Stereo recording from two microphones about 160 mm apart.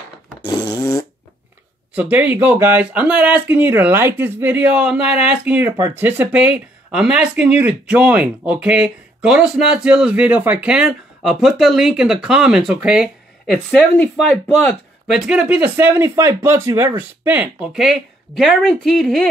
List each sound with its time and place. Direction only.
0.5 s fart: 25° left (ahead or behind)
2.0 s speech: 10° right (ahead or behind)